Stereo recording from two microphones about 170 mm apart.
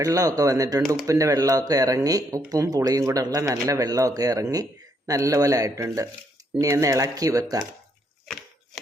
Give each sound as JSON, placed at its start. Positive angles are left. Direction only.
{"t": 0.0, "sound": "speech", "side_deg": -20}